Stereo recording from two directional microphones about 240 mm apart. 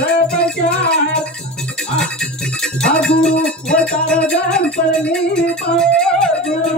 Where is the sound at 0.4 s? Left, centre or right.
Centre.